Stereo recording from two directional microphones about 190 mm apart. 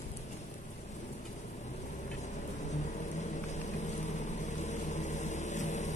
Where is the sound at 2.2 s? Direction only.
40° left (ahead or behind).